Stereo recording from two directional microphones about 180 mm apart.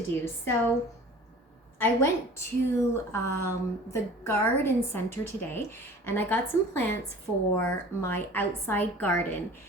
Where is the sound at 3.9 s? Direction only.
15° left (ahead or behind).